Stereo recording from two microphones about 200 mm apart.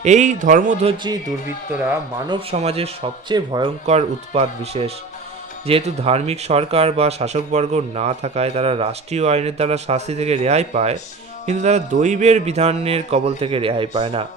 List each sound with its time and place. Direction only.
0.0 s speech: 35° right (ahead or behind)
2.2 s speech: 25° right (ahead or behind)
3.8 s speech: 30° right (ahead or behind)